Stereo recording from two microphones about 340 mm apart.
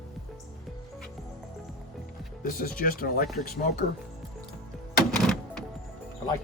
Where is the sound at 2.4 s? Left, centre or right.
Left.